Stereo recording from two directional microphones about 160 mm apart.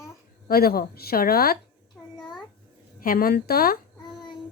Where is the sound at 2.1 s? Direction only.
25° left (ahead or behind).